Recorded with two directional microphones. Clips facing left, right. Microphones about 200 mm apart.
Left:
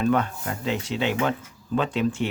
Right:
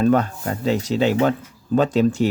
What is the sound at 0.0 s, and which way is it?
Speech, 40° right (ahead or behind).